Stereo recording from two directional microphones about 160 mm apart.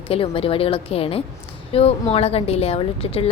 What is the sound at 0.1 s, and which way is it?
Speech, 35° left (ahead or behind).